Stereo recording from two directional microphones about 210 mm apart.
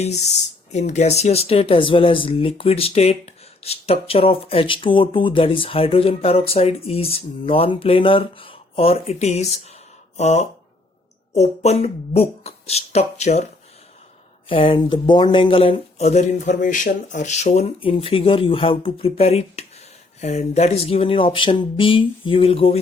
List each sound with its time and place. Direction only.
0.0 s speech: 30° left (ahead or behind)